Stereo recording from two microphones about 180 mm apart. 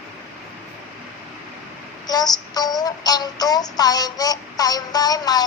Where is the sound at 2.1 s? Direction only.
20° left (ahead or behind).